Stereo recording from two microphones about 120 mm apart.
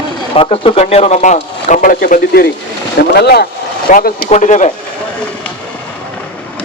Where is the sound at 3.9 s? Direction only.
90° left.